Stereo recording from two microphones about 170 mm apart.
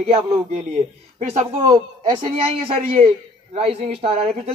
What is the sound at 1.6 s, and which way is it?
Speech, 25° right (ahead or behind).